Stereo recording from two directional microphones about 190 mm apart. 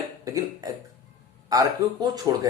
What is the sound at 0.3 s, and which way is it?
A man's voice, 20° right (ahead or behind).